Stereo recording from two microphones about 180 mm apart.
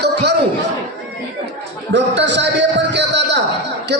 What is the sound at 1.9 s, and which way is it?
A man's voice, 80° right.